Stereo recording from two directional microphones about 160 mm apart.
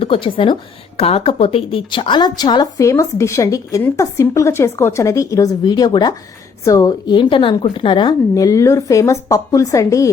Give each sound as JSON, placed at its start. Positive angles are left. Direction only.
{"t": 0.0, "sound": "a woman's voice", "side_deg": 35}